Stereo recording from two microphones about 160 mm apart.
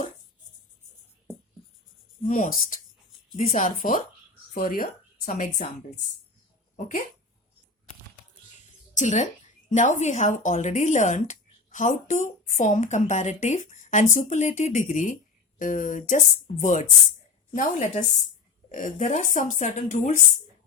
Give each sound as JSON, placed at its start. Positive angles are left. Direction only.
{"t": 2.2, "sound": "a woman's voice", "side_deg": 55}
{"t": 6.7, "sound": "speech", "side_deg": 55}
{"t": 9.0, "sound": "a woman's voice", "side_deg": 50}